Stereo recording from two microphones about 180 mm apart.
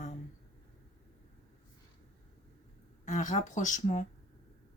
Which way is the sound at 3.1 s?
45° left (ahead or behind).